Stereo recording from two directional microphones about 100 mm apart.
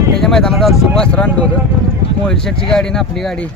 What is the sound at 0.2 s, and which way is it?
Speech, 5° left (ahead or behind).